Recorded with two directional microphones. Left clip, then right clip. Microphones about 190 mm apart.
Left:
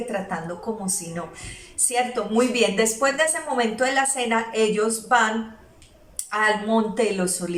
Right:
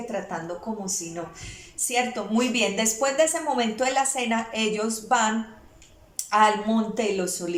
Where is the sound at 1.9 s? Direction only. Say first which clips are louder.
Left 3 dB; 15° right (ahead or behind).